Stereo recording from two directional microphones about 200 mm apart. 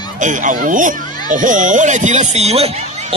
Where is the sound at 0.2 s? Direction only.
40° right (ahead or behind).